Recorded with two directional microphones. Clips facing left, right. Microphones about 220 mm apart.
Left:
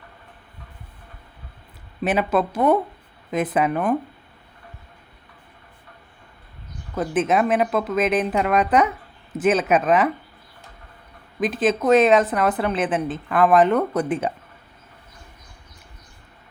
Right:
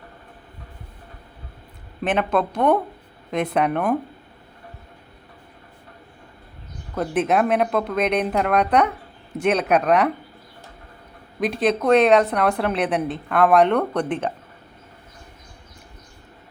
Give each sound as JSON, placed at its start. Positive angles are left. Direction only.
{"t": 2.0, "sound": "a woman's voice", "side_deg": 5}
{"t": 6.9, "sound": "a woman's voice", "side_deg": 0}
{"t": 11.3, "sound": "a woman's voice", "side_deg": 0}